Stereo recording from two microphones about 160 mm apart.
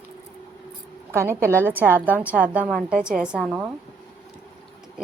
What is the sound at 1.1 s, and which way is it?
A woman's voice, 15° right (ahead or behind).